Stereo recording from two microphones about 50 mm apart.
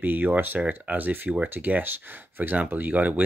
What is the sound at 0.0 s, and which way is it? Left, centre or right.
Speech, right.